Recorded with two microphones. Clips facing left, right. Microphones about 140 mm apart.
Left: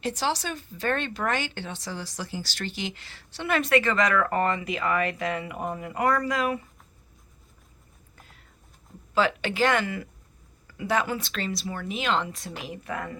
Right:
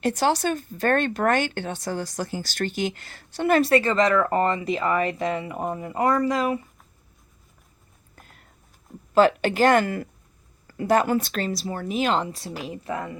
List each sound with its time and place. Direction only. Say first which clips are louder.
0.0 s speech: right 6 dB; 50° right (ahead or behind); by 6.6 s 25° right (ahead or behind)
8.1 s a sound: right 3 dB; 50° right (ahead or behind)
9.1 s speech: right 6 dB; 45° right (ahead or behind); by 13.1 s 25° right (ahead or behind)